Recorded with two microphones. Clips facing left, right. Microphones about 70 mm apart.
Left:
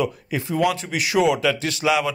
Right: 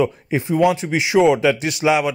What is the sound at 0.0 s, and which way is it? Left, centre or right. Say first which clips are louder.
Speech: right 5 dB; right.